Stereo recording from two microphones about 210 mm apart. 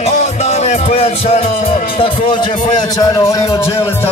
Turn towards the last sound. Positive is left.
turn(degrees=15)  # may be behind; listen again after turning